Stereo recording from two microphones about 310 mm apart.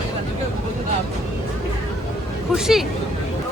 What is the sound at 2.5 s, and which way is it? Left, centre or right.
Speech, centre.